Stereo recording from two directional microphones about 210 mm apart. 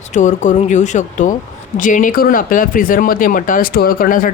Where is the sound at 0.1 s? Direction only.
35° left (ahead or behind).